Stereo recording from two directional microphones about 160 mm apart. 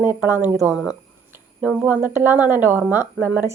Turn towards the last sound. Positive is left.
turn(degrees=-10)  # may be behind; listen again after turning